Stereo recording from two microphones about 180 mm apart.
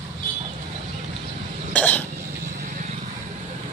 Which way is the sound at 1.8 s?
10° left (ahead or behind).